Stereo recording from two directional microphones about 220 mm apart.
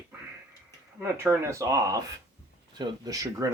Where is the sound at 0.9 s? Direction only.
10° right (ahead or behind).